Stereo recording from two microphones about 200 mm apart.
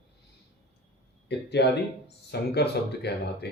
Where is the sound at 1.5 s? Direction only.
55° left (ahead or behind).